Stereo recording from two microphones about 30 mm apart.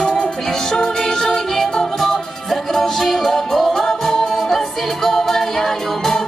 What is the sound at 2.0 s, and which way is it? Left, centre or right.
Music, centre.